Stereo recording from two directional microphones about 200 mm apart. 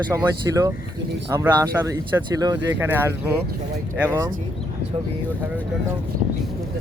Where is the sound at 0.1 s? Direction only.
15° right (ahead or behind).